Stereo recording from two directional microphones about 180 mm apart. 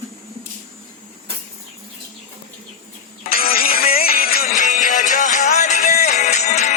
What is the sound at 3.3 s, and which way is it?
Music, 55° left (ahead or behind).